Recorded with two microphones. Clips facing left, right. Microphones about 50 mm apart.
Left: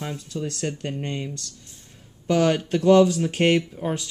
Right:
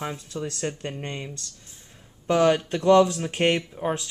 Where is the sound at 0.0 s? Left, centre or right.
Right.